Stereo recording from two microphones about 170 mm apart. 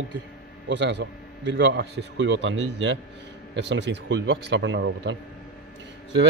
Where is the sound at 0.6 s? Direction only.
90° right.